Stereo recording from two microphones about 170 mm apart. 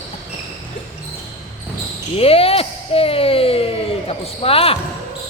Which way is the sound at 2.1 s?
35° left (ahead or behind).